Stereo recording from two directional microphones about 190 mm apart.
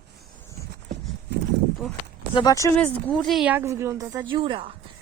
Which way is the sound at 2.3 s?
20° left (ahead or behind).